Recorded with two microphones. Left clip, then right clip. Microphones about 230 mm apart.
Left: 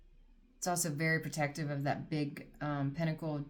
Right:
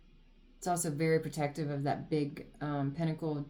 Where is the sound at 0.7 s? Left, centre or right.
Left.